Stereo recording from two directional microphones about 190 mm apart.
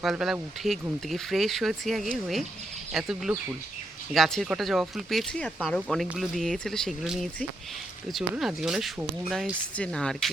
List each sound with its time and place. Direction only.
0.0 s speech: centre (ahead or behind)